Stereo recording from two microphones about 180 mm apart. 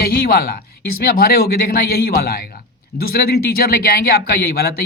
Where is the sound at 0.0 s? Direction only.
60° left (ahead or behind).